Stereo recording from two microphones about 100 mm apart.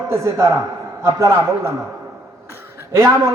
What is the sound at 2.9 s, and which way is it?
Speech, 30° right (ahead or behind).